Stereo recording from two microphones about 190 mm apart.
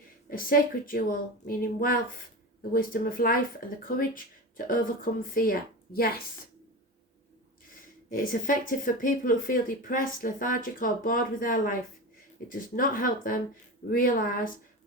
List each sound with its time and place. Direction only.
0.3 s speech: 50° left (ahead or behind)
8.1 s speech: 45° left (ahead or behind)